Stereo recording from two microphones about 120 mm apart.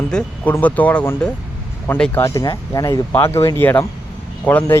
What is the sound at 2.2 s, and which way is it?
Speech, 30° left (ahead or behind).